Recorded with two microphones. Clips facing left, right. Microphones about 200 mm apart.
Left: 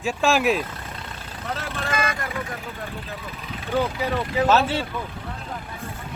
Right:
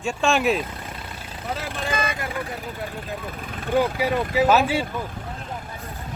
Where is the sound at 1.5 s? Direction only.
10° right (ahead or behind).